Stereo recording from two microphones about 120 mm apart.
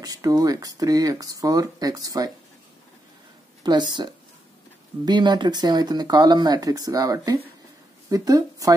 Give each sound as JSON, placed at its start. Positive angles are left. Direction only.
{"t": 0.0, "sound": "speech", "side_deg": -30}
{"t": 3.6, "sound": "speech", "side_deg": -35}